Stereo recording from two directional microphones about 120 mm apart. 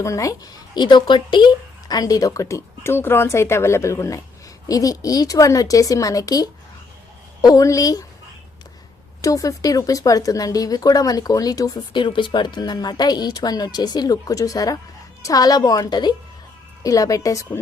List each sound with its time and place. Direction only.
0.0 s speech: 25° left (ahead or behind)
9.2 s speech: 30° left (ahead or behind)